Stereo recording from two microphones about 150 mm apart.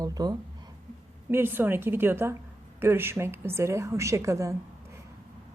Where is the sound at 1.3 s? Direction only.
15° right (ahead or behind).